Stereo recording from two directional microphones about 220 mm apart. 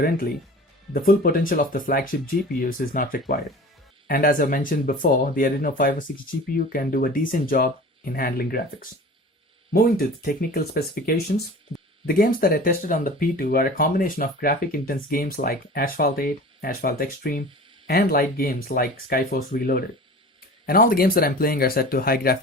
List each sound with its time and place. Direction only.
0.9 s speech: 40° left (ahead or behind)
10.2 s speech: 40° left (ahead or behind)